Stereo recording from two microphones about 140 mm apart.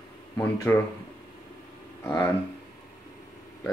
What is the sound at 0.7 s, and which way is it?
Speech, 15° left (ahead or behind).